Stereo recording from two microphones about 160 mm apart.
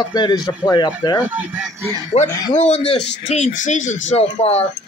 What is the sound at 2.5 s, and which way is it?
Speech, 45° left (ahead or behind).